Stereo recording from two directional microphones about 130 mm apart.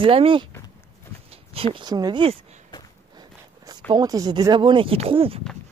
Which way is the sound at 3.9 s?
30° right (ahead or behind).